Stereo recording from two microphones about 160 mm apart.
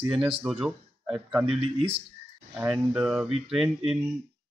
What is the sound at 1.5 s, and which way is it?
Speech, 40° right (ahead or behind).